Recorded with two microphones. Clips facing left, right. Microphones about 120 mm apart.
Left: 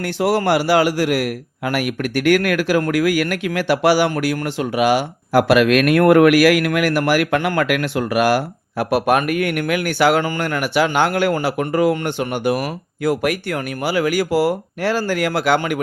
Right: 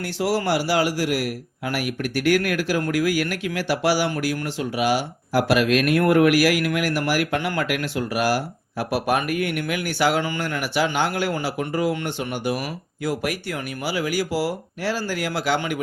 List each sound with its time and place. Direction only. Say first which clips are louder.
0.0 s a man's voice: left 5 dB; 60° left (ahead or behind)